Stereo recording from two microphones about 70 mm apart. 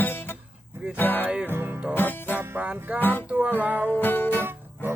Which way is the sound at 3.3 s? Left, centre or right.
Right.